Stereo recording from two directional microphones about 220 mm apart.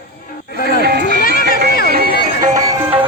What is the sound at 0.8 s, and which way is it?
Music, 45° right (ahead or behind).